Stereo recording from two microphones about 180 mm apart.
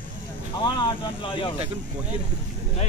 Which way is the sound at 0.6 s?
30° left (ahead or behind).